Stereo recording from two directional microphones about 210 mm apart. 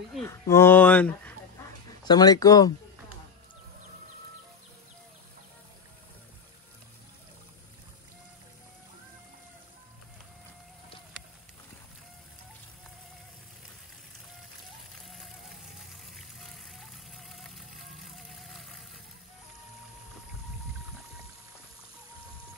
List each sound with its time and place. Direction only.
0.1 s speech: 10° left (ahead or behind)
2.0 s speech: 20° left (ahead or behind)
16.7 s vehicle: centre (ahead or behind)